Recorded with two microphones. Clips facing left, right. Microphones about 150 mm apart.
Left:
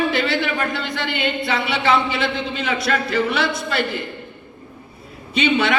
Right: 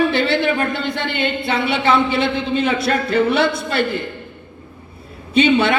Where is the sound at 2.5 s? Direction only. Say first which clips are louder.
Right 6 dB; 25° right (ahead or behind).